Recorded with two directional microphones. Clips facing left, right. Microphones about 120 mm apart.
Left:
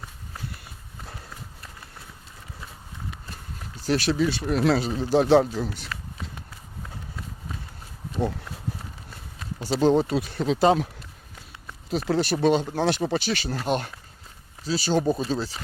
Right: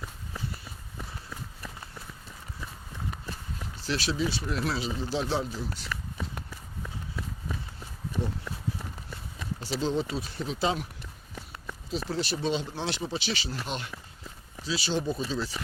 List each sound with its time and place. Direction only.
3.8 s speech: 50° left (ahead or behind)
9.6 s speech: 55° left (ahead or behind); by 10.6 s 75° left (ahead or behind)
11.9 s speech: 60° left (ahead or behind); by 15.5 s 35° left (ahead or behind)